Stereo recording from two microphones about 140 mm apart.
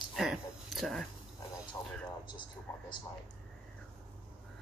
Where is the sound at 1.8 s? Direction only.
20° left (ahead or behind).